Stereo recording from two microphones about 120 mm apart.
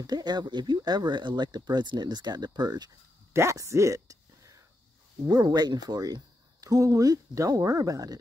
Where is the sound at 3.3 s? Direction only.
25° right (ahead or behind).